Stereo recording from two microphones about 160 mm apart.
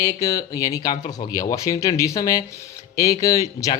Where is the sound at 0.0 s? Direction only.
20° left (ahead or behind).